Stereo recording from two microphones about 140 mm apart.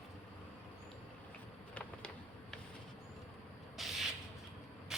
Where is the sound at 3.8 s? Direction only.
Centre (ahead or behind).